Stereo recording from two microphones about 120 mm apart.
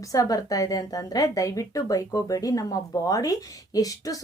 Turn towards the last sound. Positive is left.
turn(degrees=30)  # may be behind; listen again after turning